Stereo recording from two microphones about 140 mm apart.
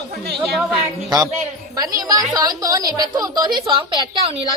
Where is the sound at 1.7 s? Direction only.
25° right (ahead or behind).